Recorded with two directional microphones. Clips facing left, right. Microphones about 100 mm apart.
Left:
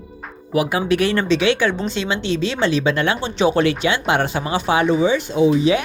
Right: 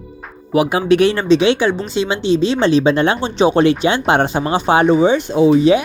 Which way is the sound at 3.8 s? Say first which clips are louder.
Right 4 dB; 35° right (ahead or behind).